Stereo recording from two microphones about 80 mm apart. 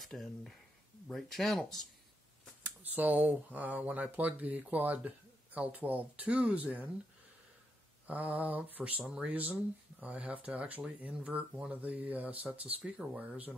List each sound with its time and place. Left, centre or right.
0.0 s speech: centre
2.6 s speech: right
8.1 s speech: centre